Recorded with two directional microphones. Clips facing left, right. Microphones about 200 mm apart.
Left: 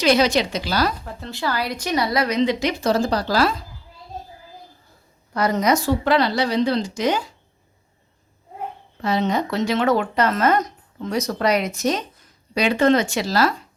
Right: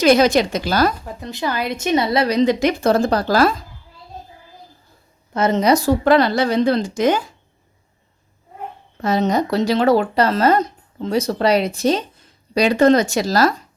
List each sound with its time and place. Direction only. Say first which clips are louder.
0.0 s a woman's voice: right 4 dB; 50° right (ahead or behind)
1.0 s speech: right 2 dB; 15° right (ahead or behind); by 3.5 s 50° right (ahead or behind)
5.3 s a woman's voice: right 4 dB; 25° right (ahead or behind); by 7.3 s 50° right (ahead or behind)
9.0 s speech: right 3 dB; 45° right (ahead or behind)